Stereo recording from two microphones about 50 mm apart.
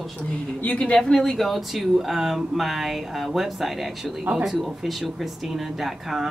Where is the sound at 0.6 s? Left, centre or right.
Left.